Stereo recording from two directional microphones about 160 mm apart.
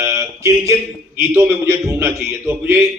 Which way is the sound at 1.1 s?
15° right (ahead or behind).